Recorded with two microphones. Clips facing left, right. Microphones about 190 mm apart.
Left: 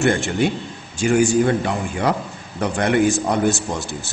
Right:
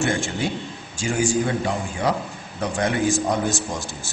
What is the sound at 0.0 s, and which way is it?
A man's voice, 60° left (ahead or behind).